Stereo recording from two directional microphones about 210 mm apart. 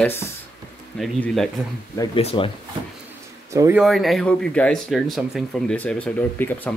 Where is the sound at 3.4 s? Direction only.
15° right (ahead or behind).